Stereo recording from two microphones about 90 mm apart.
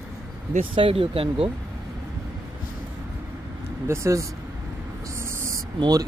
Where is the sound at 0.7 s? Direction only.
80° right.